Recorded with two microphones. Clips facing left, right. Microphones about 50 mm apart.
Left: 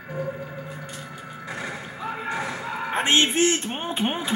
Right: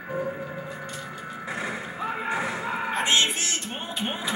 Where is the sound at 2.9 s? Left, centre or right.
Left.